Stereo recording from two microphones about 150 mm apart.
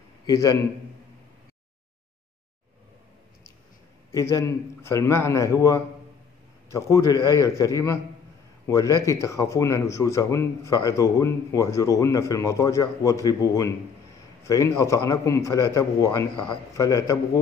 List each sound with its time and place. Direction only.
0.3 s speech: 20° left (ahead or behind)
4.1 s speech: 20° left (ahead or behind)